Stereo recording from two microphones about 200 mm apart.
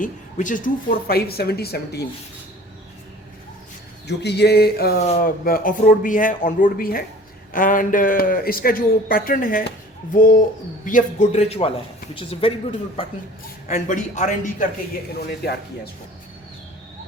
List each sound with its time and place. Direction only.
0.0 s a man's voice: 40° left (ahead or behind)
4.0 s a sound: 55° left (ahead or behind)
5.1 s a man's voice: 45° left (ahead or behind); by 12.5 s 30° left (ahead or behind)
13.7 s a man's voice: 40° left (ahead or behind)
15.2 s a man's voice: 55° left (ahead or behind)